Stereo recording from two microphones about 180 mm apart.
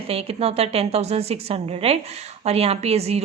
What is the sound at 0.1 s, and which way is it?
A woman's voice, 35° right (ahead or behind).